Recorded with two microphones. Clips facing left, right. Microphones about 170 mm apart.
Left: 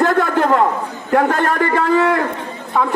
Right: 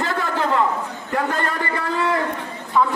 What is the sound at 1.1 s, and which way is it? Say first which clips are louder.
A man's voice: left 8 dB; 60° left (ahead or behind).